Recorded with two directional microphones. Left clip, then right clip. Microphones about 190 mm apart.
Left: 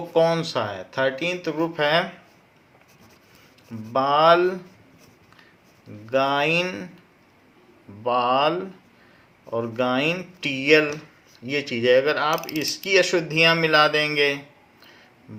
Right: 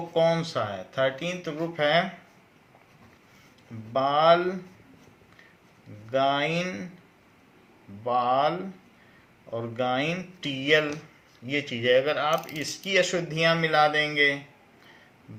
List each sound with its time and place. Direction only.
0.1 s speech: 45° left (ahead or behind)
3.9 s speech: 45° left (ahead or behind)
6.1 s speech: 45° left (ahead or behind)
8.0 s speech: 45° left (ahead or behind)